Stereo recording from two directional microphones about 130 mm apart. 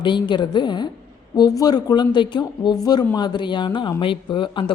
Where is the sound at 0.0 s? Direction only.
35° left (ahead or behind).